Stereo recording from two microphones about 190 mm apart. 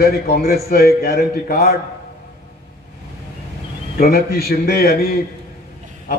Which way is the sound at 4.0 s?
55° left (ahead or behind).